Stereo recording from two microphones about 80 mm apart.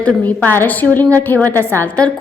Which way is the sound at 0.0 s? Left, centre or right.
Centre.